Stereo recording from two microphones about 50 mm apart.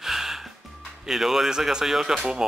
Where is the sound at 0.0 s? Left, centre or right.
Centre.